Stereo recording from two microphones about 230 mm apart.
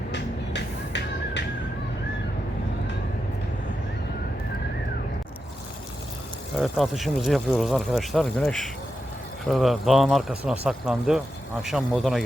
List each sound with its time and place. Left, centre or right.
0.1 s music: left
6.6 s speech: centre